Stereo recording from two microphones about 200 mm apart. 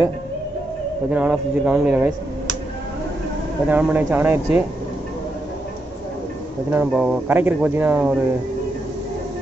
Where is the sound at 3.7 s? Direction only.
10° right (ahead or behind).